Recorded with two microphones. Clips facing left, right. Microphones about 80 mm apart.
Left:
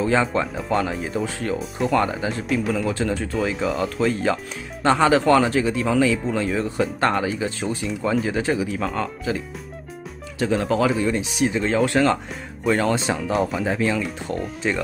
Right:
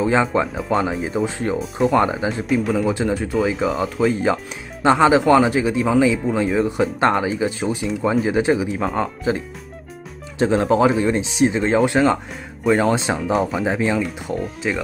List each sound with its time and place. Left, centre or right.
0.0 s speech: centre
0.6 s speech: centre
1.2 s speech: centre
1.6 s speech: centre
2.0 s speech: right
2.4 s speech: centre
2.9 s speech: centre
4.8 s speech: centre
10.4 s speech: right
12.6 s speech: centre
12.9 s speech: right
13.3 s speech: centre